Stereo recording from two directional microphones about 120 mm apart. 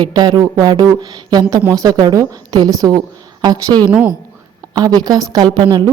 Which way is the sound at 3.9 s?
10° right (ahead or behind).